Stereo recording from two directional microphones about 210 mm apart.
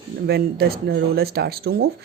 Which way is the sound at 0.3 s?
50° right (ahead or behind).